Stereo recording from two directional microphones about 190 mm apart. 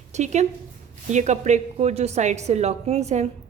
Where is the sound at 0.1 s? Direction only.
35° right (ahead or behind).